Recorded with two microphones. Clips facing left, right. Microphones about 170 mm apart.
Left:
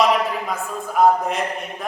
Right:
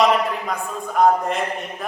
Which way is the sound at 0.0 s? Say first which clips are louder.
Even; centre (ahead or behind).